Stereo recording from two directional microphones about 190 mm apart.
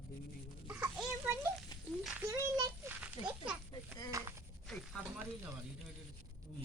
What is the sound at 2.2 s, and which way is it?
A child's voice, 15° right (ahead or behind).